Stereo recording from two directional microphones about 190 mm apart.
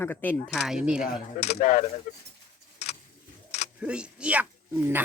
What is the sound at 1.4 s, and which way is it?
Speech, 35° left (ahead or behind).